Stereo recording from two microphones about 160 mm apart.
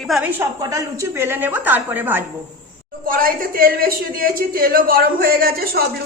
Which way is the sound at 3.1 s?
65° right (ahead or behind).